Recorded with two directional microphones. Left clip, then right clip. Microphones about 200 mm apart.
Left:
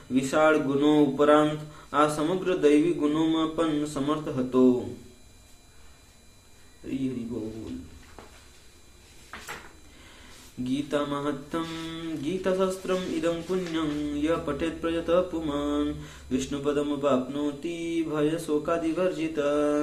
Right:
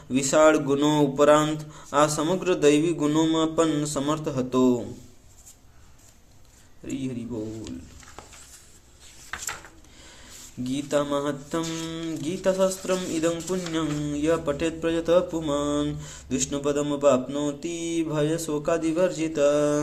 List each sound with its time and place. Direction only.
0.1 s speech: 40° right (ahead or behind)
1.9 s a sound: 40° right (ahead or behind)
10.6 s speech: 35° right (ahead or behind)